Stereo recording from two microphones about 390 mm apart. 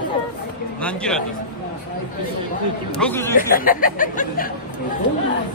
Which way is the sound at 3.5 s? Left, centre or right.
Left.